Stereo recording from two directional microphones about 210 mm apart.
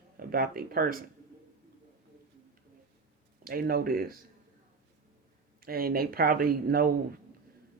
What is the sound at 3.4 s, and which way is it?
Speech, 45° right (ahead or behind).